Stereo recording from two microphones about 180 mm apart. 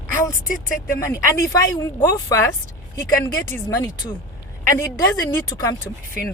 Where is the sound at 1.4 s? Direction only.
20° left (ahead or behind).